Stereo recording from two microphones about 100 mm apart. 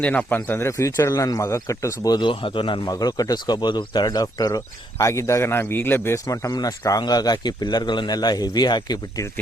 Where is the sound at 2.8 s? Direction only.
40° left (ahead or behind).